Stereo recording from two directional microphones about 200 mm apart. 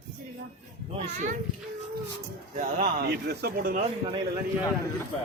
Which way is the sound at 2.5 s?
40° right (ahead or behind).